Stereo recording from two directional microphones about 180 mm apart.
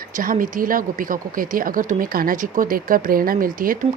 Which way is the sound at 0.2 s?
50° right (ahead or behind).